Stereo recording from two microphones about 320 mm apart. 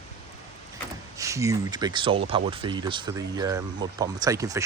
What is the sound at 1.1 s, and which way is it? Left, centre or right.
Speech, centre.